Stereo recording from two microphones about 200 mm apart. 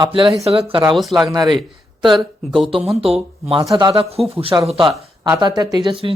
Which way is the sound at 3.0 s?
30° right (ahead or behind).